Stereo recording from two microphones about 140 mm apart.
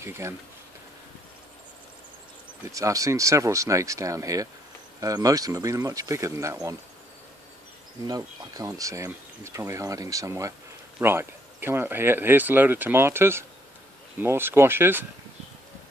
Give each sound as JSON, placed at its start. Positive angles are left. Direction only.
{"t": 0.0, "sound": "speech", "side_deg": -20}
{"t": 2.7, "sound": "speech", "side_deg": -25}
{"t": 8.1, "sound": "speech", "side_deg": -25}